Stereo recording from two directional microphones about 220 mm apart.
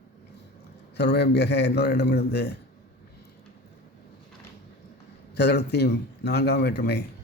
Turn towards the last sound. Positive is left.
turn(degrees=50)  # may be behind; listen again after turning